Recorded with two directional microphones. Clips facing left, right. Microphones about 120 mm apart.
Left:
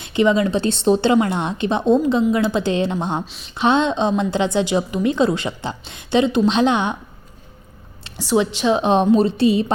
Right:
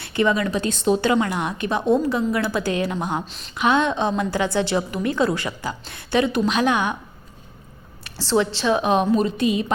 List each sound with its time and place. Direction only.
0.0 s a woman's voice: 20° left (ahead or behind)
8.0 s a woman's voice: 15° left (ahead or behind); by 9.7 s 30° left (ahead or behind)